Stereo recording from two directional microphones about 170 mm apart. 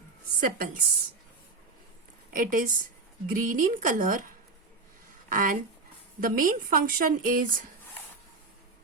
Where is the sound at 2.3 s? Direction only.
55° right (ahead or behind).